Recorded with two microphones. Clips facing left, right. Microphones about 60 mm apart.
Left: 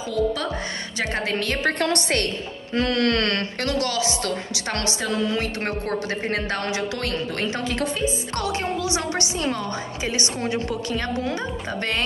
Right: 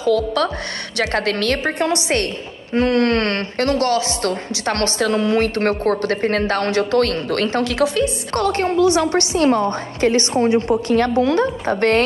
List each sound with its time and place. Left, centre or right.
0.0 s a woman's voice: right
1.6 s a woman's voice: centre
2.7 s speech: right
7.6 s a woman's voice: right
8.3 s speech: right
8.8 s a woman's voice: right
11.2 s a woman's voice: right
11.7 s speech: right